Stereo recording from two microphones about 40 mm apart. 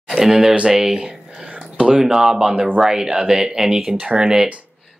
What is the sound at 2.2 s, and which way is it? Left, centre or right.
Speech, centre.